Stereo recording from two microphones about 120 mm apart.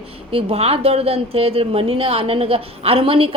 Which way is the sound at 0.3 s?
50° right (ahead or behind).